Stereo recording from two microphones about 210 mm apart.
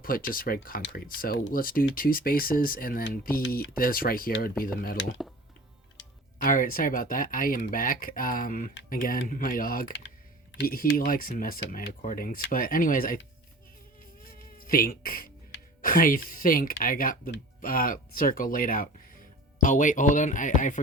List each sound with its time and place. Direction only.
0.0 s speech: 40° left (ahead or behind)
6.4 s speech: 40° left (ahead or behind)
14.3 s speech: 45° left (ahead or behind)